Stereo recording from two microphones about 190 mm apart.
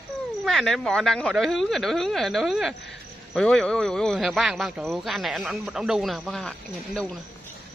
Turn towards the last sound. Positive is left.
turn(degrees=5)  # may be behind; listen again after turning